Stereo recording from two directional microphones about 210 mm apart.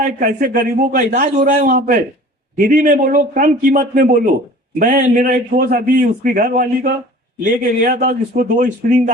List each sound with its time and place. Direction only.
0.0 s a man's voice: 40° right (ahead or behind)